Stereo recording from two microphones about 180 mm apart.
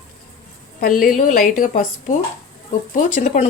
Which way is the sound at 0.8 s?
50° left (ahead or behind).